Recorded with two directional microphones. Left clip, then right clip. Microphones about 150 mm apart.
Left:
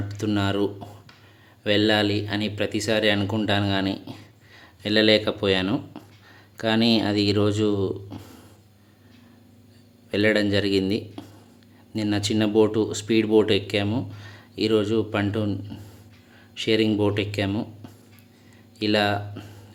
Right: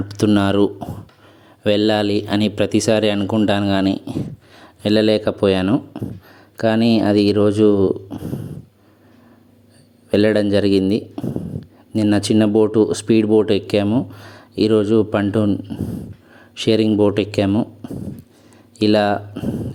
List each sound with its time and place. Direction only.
0.1 s speech: 45° right (ahead or behind); by 5.7 s 30° right (ahead or behind)
6.0 s speech: 15° right (ahead or behind)
6.6 s speech: 30° right (ahead or behind)
10.1 s speech: 35° right (ahead or behind)
16.6 s speech: 40° right (ahead or behind)
18.8 s speech: 40° right (ahead or behind)